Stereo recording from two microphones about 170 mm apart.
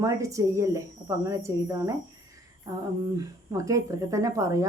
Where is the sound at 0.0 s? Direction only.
20° right (ahead or behind).